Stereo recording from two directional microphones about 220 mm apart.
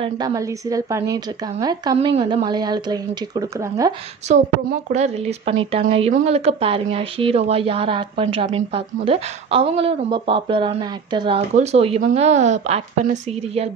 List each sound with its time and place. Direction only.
0.0 s speech: 15° right (ahead or behind)
4.6 s speech: 35° right (ahead or behind)